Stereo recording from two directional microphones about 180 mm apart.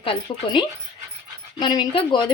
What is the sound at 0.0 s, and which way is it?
A woman's voice, 30° left (ahead or behind).